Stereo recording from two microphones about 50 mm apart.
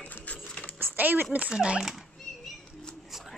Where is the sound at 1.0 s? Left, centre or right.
Right.